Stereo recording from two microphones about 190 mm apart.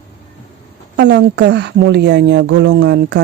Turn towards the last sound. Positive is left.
turn(degrees=-65)  # may be behind; listen again after turning